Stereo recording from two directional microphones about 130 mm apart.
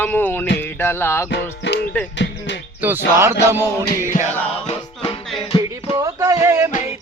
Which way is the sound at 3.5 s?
20° right (ahead or behind).